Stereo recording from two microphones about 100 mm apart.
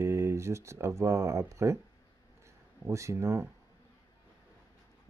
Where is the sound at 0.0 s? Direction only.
25° right (ahead or behind).